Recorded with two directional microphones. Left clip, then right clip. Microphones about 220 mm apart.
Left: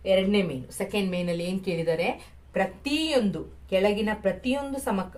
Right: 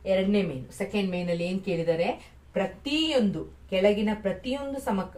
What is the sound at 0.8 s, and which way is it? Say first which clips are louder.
Speech: left 1 dB; 50° left (ahead or behind).